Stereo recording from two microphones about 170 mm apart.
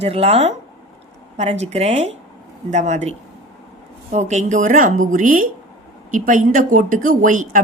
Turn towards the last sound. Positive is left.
turn(degrees=-50)  # may be behind; listen again after turning